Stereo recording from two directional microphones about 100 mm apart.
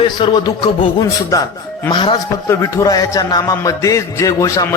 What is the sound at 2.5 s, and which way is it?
Music, 30° left (ahead or behind).